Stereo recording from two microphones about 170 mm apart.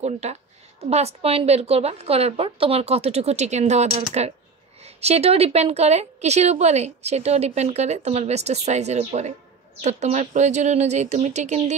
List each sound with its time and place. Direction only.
0.0 s a woman's voice: 40° right (ahead or behind)